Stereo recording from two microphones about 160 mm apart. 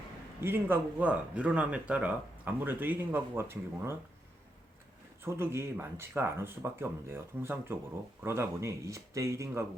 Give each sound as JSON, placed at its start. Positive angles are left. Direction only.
{"t": 0.4, "sound": "speech", "side_deg": -15}
{"t": 5.2, "sound": "speech", "side_deg": -15}